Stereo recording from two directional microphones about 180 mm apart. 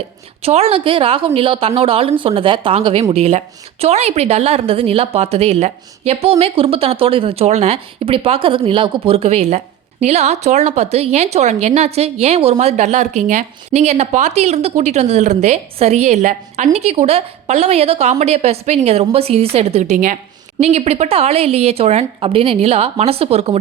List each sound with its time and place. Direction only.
0.4 s a woman's voice: 35° right (ahead or behind)